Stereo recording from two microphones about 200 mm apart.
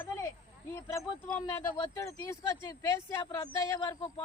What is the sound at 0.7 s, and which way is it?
Speech, 5° left (ahead or behind).